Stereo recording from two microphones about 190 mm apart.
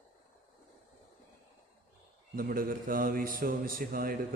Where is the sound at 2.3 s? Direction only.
50° right (ahead or behind).